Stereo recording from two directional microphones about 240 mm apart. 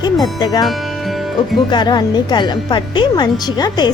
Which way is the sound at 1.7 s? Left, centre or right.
Centre.